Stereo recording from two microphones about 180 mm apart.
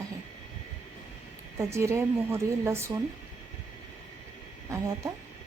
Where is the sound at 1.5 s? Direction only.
15° right (ahead or behind).